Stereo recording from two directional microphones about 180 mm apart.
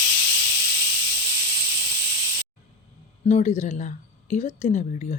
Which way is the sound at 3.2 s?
40° left (ahead or behind).